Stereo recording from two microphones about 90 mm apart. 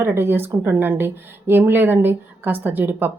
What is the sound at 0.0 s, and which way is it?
Speech, 25° right (ahead or behind).